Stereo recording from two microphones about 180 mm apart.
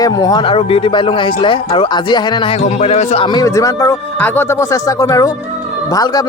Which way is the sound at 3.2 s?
20° left (ahead or behind).